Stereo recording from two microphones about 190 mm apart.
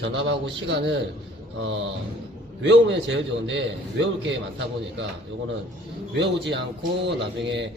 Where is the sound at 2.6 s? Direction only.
70° right (ahead or behind).